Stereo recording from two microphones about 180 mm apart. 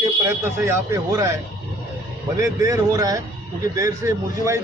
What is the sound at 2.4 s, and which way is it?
A man's voice, 20° right (ahead or behind).